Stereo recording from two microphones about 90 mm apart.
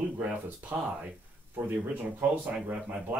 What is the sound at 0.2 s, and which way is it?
A man's voice, 15° right (ahead or behind).